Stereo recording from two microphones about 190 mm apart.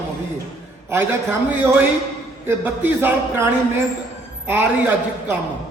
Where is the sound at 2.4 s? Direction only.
10° right (ahead or behind).